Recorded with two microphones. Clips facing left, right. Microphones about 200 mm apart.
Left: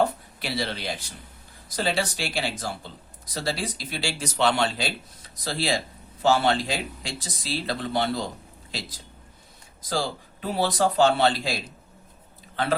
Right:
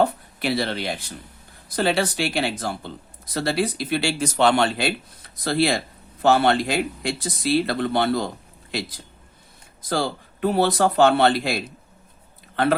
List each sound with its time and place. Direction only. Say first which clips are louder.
0.3 s speech: right 7 dB; 55° right (ahead or behind)
9.9 s speech: right 4 dB; 60° right (ahead or behind)